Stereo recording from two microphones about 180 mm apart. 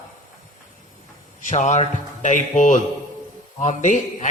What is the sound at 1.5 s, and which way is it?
Speech, 45° left (ahead or behind).